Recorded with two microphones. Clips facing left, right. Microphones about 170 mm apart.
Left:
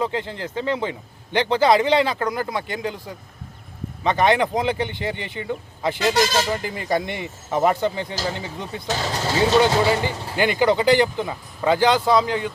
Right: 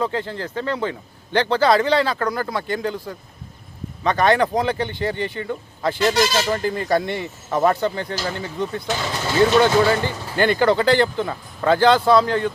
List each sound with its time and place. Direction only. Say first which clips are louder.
0.0 s a man's voice: right 1 dB; 20° left (ahead or behind)
4.0 s a man's voice: right 1 dB; 20° left (ahead or behind)
8.9 s speech: even; 35° left (ahead or behind)
9.6 s a man's voice: right 2 dB; 20° left (ahead or behind)